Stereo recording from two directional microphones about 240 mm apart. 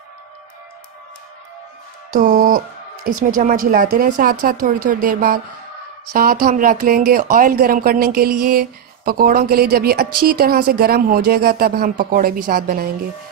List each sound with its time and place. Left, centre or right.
2.0 s speech: right